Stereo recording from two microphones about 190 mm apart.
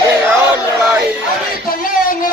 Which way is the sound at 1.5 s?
50° left (ahead or behind).